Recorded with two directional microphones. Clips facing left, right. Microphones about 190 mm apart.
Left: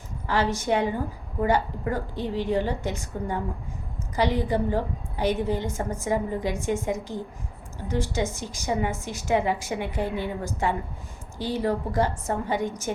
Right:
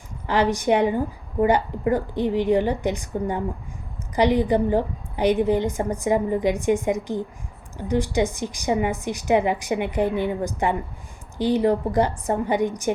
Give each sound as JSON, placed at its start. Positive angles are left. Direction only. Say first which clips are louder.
{"t": 0.3, "sound": "a woman's voice", "louder": "right 4 dB", "side_deg": -15}